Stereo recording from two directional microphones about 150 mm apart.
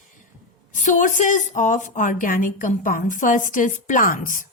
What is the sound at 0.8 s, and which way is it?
A woman's voice, 60° left (ahead or behind).